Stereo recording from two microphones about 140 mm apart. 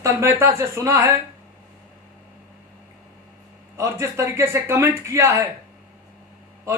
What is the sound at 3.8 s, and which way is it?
A man's voice, 20° right (ahead or behind).